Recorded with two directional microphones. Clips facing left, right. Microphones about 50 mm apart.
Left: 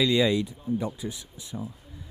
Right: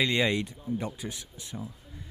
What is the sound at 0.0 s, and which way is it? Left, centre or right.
Speech, right.